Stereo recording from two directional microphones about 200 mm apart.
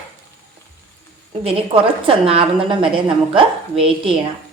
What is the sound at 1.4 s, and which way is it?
A woman's voice, 25° right (ahead or behind).